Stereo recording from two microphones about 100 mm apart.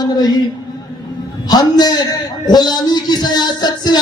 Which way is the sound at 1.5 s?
40° left (ahead or behind).